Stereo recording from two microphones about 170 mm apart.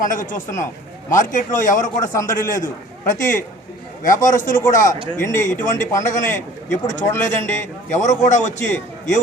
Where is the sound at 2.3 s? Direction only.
50° left (ahead or behind).